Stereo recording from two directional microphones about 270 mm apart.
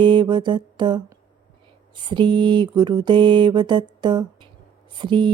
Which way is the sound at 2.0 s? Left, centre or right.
Centre.